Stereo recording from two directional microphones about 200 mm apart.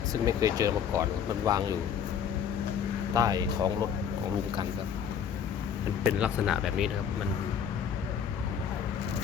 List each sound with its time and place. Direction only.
0.1 s speech: 15° right (ahead or behind)
3.2 s speech: 20° right (ahead or behind)
6.0 s speech: 5° right (ahead or behind)